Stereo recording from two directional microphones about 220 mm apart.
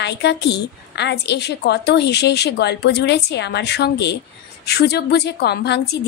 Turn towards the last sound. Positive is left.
turn(degrees=50)  # may be behind; listen again after turning